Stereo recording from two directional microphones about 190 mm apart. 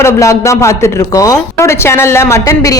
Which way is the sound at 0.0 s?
15° left (ahead or behind).